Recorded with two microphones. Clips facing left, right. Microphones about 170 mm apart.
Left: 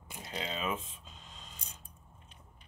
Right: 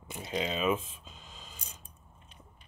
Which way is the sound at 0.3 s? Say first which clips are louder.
Right 6 dB; 15° right (ahead or behind).